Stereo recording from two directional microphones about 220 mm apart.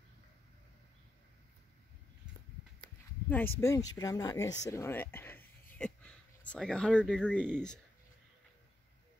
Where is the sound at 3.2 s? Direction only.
10° left (ahead or behind).